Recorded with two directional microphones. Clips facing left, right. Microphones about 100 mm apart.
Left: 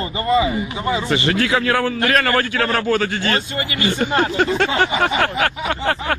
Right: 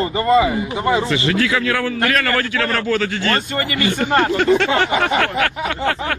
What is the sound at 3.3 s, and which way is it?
Speech, 45° right (ahead or behind).